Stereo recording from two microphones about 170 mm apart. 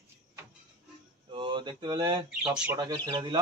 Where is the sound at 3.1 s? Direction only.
25° right (ahead or behind).